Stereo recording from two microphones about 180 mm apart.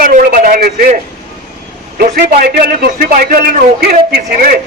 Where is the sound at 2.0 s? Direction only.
55° right (ahead or behind).